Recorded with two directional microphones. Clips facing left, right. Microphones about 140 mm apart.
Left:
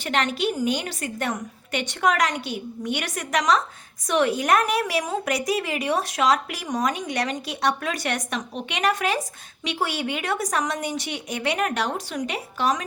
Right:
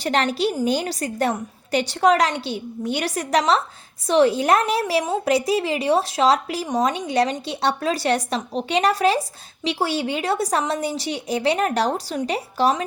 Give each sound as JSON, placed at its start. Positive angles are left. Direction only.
{"t": 0.0, "sound": "a woman's voice", "side_deg": -35}